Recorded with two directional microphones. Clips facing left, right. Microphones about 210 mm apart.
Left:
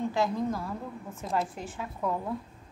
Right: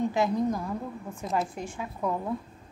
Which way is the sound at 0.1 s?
20° right (ahead or behind).